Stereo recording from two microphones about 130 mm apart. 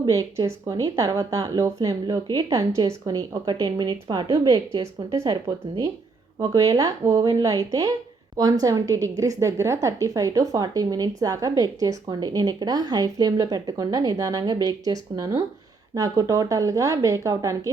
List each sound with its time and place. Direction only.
0.0 s a woman's voice: 25° right (ahead or behind)